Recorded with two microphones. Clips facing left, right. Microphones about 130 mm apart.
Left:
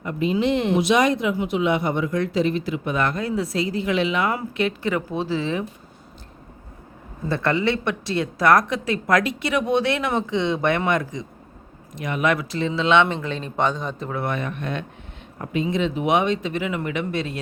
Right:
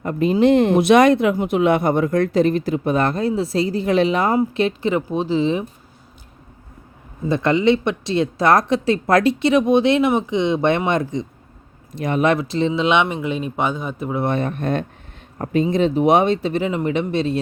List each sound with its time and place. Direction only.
0.0 s speech: 45° right (ahead or behind)
4.4 s speech: 25° right (ahead or behind)
7.3 s speech: 20° right (ahead or behind)
14.2 s speech: 30° right (ahead or behind)